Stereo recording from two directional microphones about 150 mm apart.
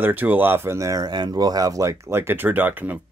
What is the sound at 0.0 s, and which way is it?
Speech, 15° right (ahead or behind).